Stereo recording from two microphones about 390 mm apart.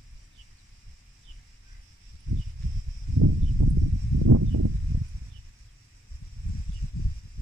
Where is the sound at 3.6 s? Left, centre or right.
Right.